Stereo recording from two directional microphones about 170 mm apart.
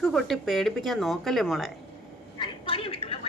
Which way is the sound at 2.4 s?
35° left (ahead or behind).